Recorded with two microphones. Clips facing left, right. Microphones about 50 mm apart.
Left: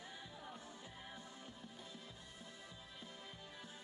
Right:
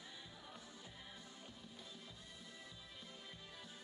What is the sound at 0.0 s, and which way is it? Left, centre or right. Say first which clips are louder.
Music: left 3 dB; left.